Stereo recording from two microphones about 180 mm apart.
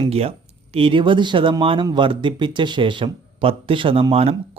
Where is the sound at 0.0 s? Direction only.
35° right (ahead or behind).